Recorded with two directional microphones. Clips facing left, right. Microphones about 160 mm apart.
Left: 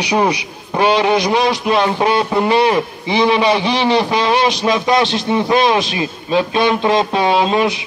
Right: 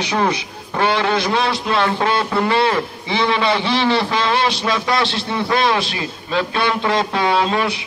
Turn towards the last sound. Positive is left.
turn(degrees=20)  # may be behind; listen again after turning